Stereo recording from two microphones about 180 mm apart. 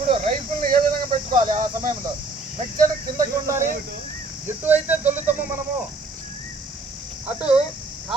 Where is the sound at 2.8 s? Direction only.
15° right (ahead or behind).